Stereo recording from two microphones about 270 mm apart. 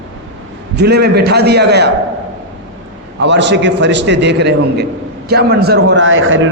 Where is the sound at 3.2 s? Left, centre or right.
Right.